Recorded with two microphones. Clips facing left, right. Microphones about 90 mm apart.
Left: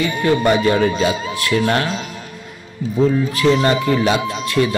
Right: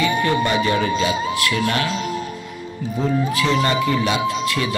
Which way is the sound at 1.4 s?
40° left (ahead or behind).